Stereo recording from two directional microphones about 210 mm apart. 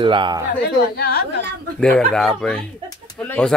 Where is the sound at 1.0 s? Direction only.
50° left (ahead or behind).